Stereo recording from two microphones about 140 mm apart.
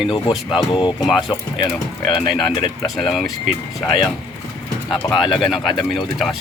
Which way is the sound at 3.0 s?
Centre (ahead or behind).